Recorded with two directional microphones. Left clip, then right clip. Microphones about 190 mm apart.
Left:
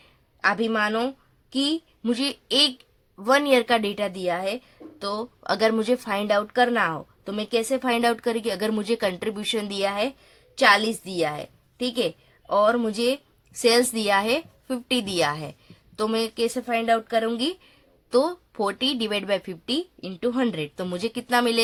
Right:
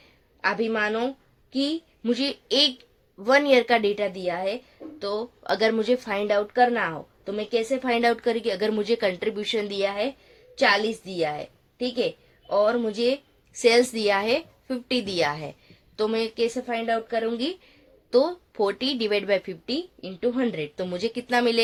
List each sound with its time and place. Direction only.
0.4 s a woman's voice: 30° left (ahead or behind)